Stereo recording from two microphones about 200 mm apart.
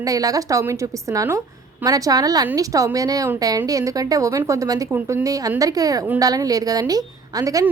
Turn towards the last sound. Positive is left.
turn(degrees=-15)  # may be behind; listen again after turning